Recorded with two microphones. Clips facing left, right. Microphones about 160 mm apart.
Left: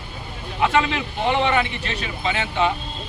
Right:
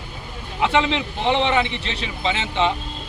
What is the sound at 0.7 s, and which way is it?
A man's voice, 20° right (ahead or behind).